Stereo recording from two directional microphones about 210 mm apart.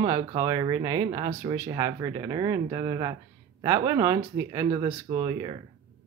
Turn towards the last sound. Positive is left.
turn(degrees=-20)  # may be behind; listen again after turning